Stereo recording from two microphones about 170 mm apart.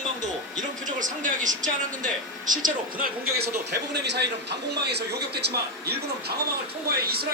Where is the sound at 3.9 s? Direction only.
80° right.